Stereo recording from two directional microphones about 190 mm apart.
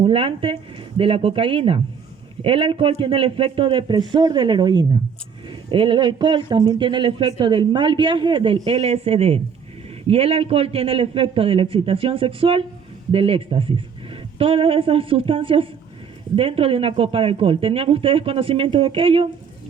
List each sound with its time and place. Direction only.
0.0 s a woman's voice: 30° right (ahead or behind)